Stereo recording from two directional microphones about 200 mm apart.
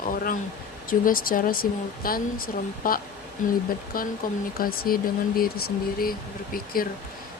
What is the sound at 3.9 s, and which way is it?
Speech, 45° left (ahead or behind).